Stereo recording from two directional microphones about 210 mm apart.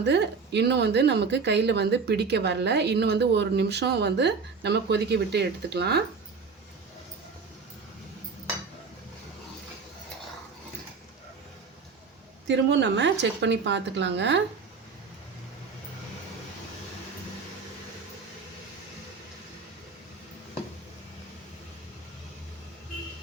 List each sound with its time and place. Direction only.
0.0 s a woman's voice: 55° right (ahead or behind)
12.5 s a woman's voice: 60° right (ahead or behind)